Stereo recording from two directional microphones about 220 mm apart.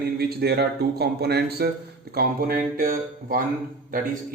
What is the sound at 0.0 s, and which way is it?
Speech, 45° right (ahead or behind).